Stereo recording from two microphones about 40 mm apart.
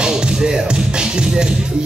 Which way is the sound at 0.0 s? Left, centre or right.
Centre.